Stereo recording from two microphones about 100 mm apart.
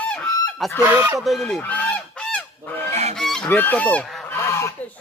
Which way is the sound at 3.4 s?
20° left (ahead or behind).